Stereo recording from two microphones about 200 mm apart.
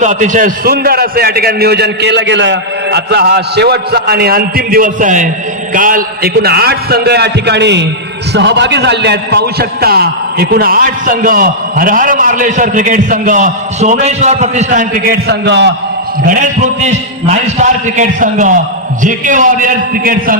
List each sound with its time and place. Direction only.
0.0 s a man's voice: 40° right (ahead or behind); by 15.7 s 60° right (ahead or behind)
16.2 s a man's voice: 40° right (ahead or behind)